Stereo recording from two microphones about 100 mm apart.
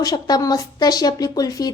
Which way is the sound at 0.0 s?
40° left (ahead or behind).